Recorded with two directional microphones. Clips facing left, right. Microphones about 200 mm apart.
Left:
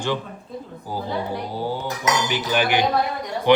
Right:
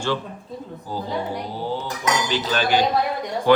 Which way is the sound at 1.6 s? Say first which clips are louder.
Left 1 dB; 10° left (ahead or behind).